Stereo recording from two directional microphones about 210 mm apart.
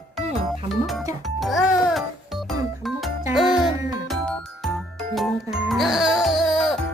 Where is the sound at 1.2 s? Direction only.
Centre (ahead or behind).